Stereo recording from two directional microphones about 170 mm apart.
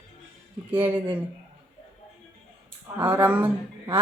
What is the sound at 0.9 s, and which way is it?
Speech, 10° right (ahead or behind).